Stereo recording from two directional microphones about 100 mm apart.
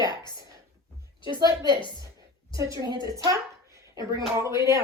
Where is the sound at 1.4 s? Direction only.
35° right (ahead or behind).